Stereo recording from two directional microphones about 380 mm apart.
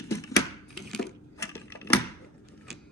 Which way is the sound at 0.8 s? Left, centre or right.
Centre.